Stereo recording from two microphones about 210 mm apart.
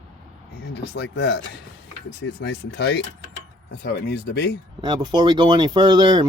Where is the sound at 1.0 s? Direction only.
55° left (ahead or behind).